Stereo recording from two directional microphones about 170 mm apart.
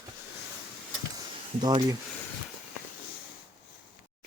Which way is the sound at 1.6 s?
25° right (ahead or behind).